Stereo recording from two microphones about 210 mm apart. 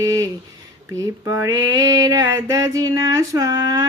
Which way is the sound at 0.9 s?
15° right (ahead or behind).